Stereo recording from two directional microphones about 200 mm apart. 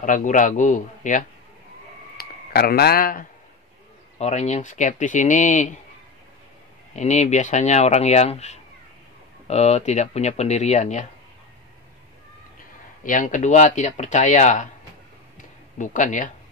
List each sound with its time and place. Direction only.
0.0 s speech: 40° left (ahead or behind)
2.1 s speech: 50° left (ahead or behind)
4.2 s speech: 35° left (ahead or behind)
7.0 s speech: 35° left (ahead or behind)
13.0 s speech: 40° left (ahead or behind)
15.8 s speech: 40° left (ahead or behind)